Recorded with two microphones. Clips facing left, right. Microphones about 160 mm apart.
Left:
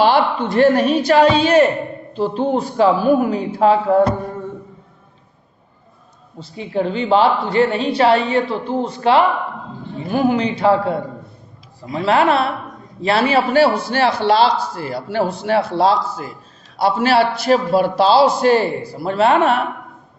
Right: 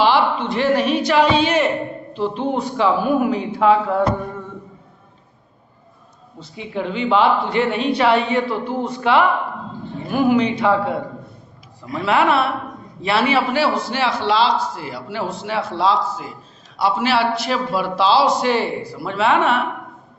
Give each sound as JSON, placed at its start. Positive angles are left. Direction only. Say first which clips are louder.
{"t": 0.0, "sound": "a woman's voice", "louder": "left 2 dB", "side_deg": 45}
{"t": 6.4, "sound": "a woman's voice", "louder": "left 5 dB", "side_deg": 35}